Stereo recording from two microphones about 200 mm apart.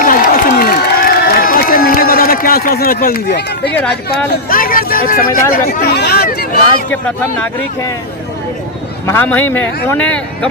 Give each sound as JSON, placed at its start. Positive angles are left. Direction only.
{"t": 0.0, "sound": "a sound", "side_deg": 45}
{"t": 4.4, "sound": "speech", "side_deg": 45}
{"t": 6.9, "sound": "speech", "side_deg": 5}
{"t": 9.0, "sound": "speech", "side_deg": 10}